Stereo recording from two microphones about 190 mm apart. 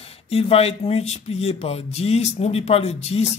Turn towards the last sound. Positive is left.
turn(degrees=35)  # may be behind; listen again after turning